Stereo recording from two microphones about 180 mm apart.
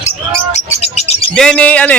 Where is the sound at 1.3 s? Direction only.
5° left (ahead or behind).